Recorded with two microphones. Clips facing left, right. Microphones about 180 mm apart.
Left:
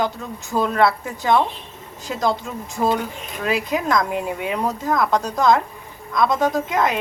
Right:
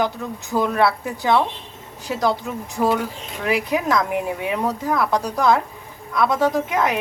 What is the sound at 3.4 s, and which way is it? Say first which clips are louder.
Speech: right 1 dB; 15° right (ahead or behind).